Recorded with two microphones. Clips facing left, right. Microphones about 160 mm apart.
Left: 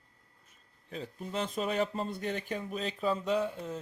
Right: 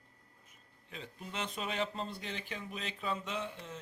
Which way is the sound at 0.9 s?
40° left (ahead or behind).